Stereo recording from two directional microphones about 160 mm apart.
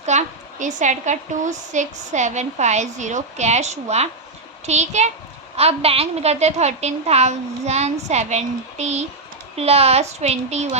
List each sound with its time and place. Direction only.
0.0 s a woman's voice: 45° right (ahead or behind)